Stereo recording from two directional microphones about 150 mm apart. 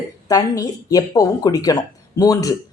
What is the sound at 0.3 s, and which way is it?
A woman's voice, 25° left (ahead or behind).